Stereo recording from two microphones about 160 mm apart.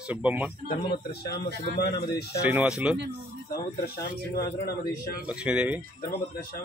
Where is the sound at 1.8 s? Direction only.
90° left.